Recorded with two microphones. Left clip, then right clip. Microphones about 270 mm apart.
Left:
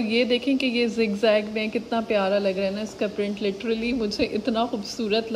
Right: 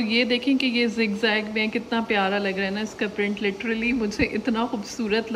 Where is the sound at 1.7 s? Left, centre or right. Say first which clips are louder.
Left 3 dB; centre.